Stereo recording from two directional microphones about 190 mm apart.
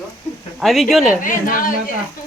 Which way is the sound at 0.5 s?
Centre (ahead or behind).